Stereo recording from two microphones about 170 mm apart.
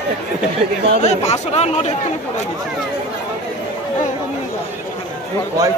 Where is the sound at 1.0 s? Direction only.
40° left (ahead or behind).